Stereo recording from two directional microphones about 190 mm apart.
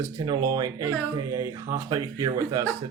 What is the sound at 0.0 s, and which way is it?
Speech, 20° right (ahead or behind).